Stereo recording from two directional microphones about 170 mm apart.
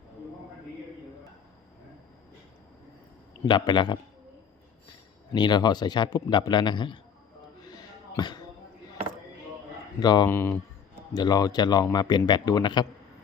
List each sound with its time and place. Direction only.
3.4 s speech: 25° left (ahead or behind)
5.3 s speech: 25° left (ahead or behind)
7.6 s a sound: 25° left (ahead or behind)
10.0 s speech: 25° left (ahead or behind)
10.2 s speech: 15° left (ahead or behind)
11.1 s speech: 25° left (ahead or behind)